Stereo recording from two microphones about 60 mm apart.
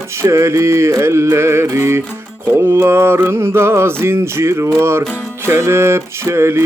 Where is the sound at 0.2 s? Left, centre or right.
Right.